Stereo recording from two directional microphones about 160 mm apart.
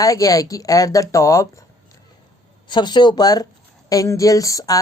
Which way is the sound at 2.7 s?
30° left (ahead or behind).